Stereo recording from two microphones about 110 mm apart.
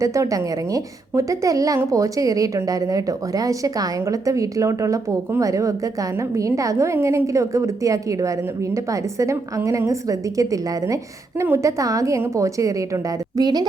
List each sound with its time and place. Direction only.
0.0 s a woman's voice: 30° right (ahead or behind)